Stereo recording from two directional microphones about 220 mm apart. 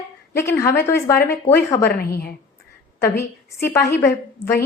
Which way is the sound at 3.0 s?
10° left (ahead or behind).